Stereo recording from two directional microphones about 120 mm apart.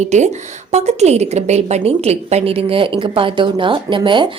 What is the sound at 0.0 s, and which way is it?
A woman's voice, 75° right (ahead or behind).